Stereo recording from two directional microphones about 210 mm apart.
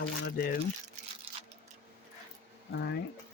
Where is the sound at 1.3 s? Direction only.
25° right (ahead or behind).